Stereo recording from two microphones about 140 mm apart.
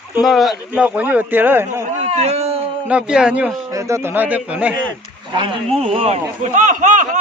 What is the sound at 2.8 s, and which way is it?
Speech, 5° right (ahead or behind).